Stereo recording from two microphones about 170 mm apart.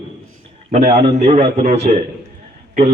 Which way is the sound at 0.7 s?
40° right (ahead or behind).